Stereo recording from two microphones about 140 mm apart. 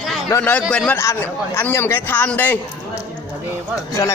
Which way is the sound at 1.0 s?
20° left (ahead or behind).